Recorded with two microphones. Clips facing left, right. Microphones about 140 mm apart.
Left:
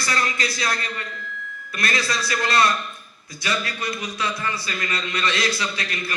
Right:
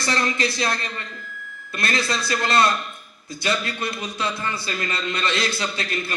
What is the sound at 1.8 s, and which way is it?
A man's voice, 25° right (ahead or behind).